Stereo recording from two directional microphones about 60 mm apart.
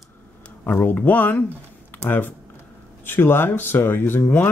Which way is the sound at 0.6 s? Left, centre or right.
Left.